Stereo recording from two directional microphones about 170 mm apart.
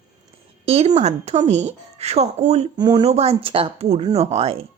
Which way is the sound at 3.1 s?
40° right (ahead or behind).